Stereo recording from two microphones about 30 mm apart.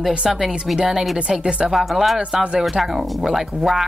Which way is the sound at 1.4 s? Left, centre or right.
Right.